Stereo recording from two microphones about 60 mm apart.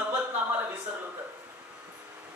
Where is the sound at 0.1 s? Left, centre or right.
Right.